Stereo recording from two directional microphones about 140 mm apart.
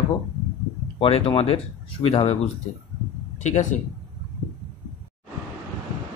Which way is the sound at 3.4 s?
55° left (ahead or behind).